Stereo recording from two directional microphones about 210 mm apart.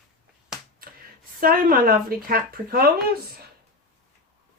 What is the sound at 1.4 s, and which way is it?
Speech, 45° right (ahead or behind).